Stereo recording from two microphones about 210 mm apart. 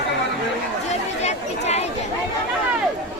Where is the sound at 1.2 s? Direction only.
30° left (ahead or behind).